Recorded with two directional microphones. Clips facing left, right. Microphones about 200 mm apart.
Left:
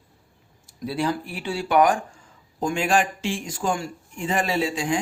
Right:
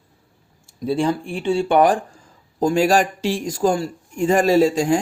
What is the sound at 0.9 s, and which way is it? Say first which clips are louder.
Speech: right 5 dB; 25° right (ahead or behind).